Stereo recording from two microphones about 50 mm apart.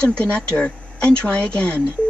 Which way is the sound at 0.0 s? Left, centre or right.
Left.